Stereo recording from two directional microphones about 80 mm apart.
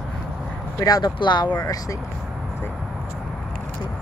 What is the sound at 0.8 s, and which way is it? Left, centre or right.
Speech, left.